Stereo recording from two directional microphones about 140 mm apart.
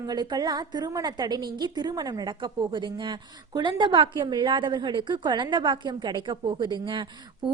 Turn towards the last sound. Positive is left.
turn(degrees=-35)  # may be behind; listen again after turning